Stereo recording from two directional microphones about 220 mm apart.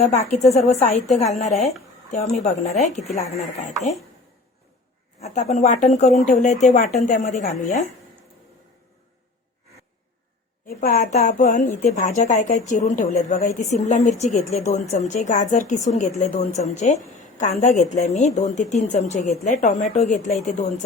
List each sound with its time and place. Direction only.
0.0 s a woman's voice: 30° left (ahead or behind)
5.2 s a woman's voice: 30° left (ahead or behind)
10.7 s a woman's voice: 35° left (ahead or behind)